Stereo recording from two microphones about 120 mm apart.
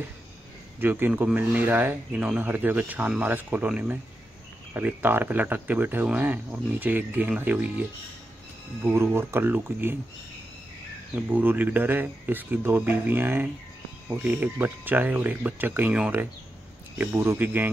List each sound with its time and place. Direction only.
0.7 s speech: 15° right (ahead or behind)
8.8 s speech: 20° right (ahead or behind)
11.1 s speech: 15° right (ahead or behind)